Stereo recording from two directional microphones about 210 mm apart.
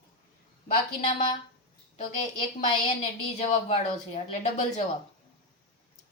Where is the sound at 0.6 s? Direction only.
35° left (ahead or behind).